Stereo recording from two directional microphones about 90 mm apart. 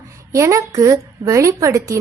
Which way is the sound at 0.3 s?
35° right (ahead or behind).